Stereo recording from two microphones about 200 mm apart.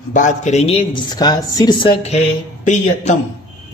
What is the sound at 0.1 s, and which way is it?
Speech, 40° left (ahead or behind).